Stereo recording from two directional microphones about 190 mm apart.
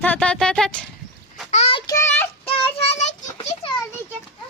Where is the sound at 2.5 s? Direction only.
30° left (ahead or behind).